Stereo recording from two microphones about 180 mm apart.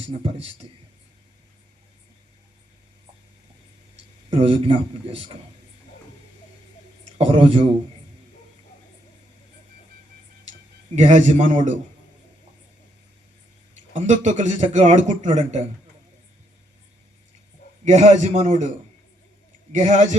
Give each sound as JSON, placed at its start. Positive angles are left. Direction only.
{"t": 0.1, "sound": "speech", "side_deg": -30}
{"t": 4.4, "sound": "a man's voice", "side_deg": -30}
{"t": 7.2, "sound": "speech", "side_deg": -30}
{"t": 10.9, "sound": "speech", "side_deg": -40}
{"t": 13.9, "sound": "speech", "side_deg": -40}
{"t": 17.8, "sound": "a man's voice", "side_deg": -40}
{"t": 19.7, "sound": "speech", "side_deg": -45}